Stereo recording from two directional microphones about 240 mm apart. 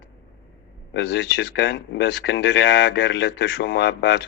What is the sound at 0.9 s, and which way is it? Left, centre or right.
Speech, left.